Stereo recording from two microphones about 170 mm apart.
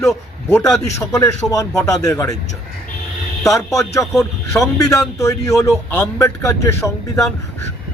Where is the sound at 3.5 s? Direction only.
20° left (ahead or behind).